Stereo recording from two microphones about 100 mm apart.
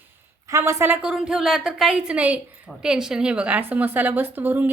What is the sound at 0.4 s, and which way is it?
Speech, 30° right (ahead or behind).